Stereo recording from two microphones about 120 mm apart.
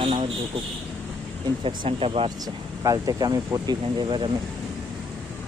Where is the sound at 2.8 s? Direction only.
30° right (ahead or behind).